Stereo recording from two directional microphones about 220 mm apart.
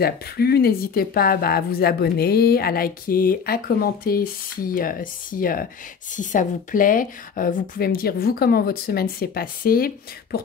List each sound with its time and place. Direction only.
0.0 s a woman's voice: 45° left (ahead or behind)